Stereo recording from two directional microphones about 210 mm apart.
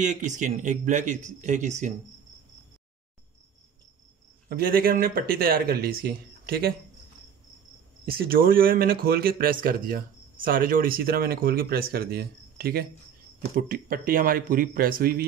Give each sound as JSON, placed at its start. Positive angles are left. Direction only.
{"t": 0.0, "sound": "speech", "side_deg": -35}
{"t": 4.5, "sound": "speech", "side_deg": -45}
{"t": 8.0, "sound": "speech", "side_deg": -45}